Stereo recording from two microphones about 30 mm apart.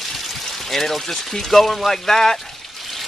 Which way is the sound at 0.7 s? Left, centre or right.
Centre.